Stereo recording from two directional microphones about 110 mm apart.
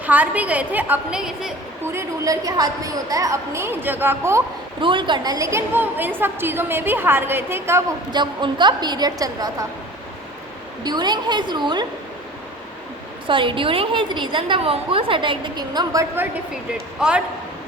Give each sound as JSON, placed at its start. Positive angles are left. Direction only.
{"t": 0.0, "sound": "a woman's voice", "side_deg": -15}
{"t": 1.2, "sound": "a woman's voice", "side_deg": -5}
{"t": 1.8, "sound": "a woman's voice", "side_deg": -20}
{"t": 2.2, "sound": "a woman's voice", "side_deg": -35}
{"t": 4.8, "sound": "a woman's voice", "side_deg": -50}
{"t": 8.1, "sound": "a woman's voice", "side_deg": -45}
{"t": 10.8, "sound": "a woman's voice", "side_deg": -40}
{"t": 13.2, "sound": "a woman's voice", "side_deg": -50}
{"t": 17.0, "sound": "a woman's voice", "side_deg": -10}